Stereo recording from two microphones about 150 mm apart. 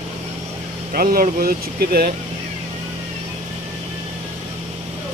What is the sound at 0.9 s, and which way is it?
Speech, 75° right (ahead or behind).